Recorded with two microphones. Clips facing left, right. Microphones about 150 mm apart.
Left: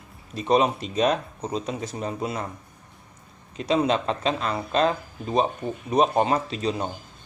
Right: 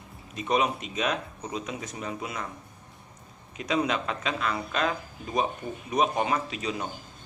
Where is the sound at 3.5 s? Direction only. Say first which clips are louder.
Left 5 dB; 30° left (ahead or behind).